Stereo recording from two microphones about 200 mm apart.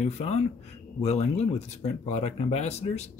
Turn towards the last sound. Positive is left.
turn(degrees=30)  # may be behind; listen again after turning